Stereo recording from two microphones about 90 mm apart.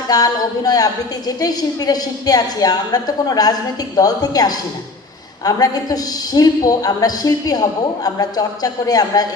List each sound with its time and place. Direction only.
0.1 s a woman's voice: 45° left (ahead or behind)